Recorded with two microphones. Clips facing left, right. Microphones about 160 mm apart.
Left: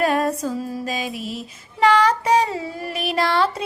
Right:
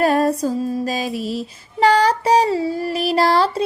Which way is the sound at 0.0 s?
35° right (ahead or behind).